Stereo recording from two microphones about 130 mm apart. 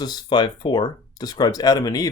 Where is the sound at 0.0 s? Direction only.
30° left (ahead or behind).